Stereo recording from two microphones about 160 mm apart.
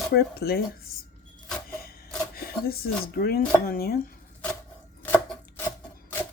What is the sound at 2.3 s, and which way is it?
Speech, 70° left (ahead or behind).